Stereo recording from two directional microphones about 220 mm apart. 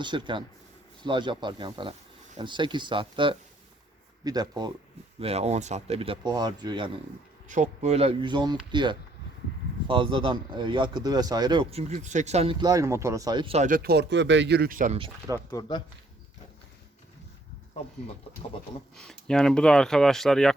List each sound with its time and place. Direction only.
0.0 s a man's voice: 20° right (ahead or behind)
5.2 s a man's voice: 30° right (ahead or behind)
7.4 s a man's voice: 35° right (ahead or behind)
14.9 s a man's voice: 20° right (ahead or behind)
15.6 s speech: 15° left (ahead or behind)
18.9 s speech: 5° left (ahead or behind)